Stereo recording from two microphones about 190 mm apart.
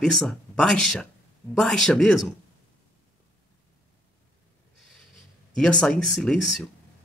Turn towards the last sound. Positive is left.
turn(degrees=0)  # may be behind; listen again after turning